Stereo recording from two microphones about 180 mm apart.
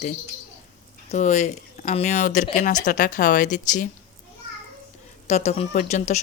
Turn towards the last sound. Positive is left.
turn(degrees=40)  # may be behind; listen again after turning